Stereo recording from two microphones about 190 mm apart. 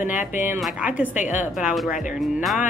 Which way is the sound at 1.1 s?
40° left (ahead or behind).